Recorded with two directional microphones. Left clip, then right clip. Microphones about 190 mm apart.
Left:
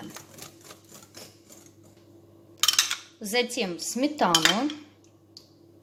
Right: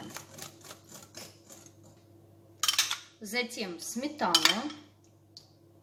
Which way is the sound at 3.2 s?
45° left (ahead or behind).